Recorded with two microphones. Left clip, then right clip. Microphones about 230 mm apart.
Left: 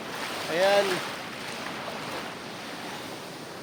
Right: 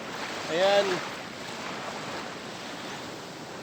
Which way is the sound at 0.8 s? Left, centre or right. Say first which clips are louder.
Left 1 dB; left.